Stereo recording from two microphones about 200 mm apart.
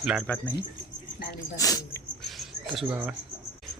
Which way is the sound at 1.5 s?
15° left (ahead or behind).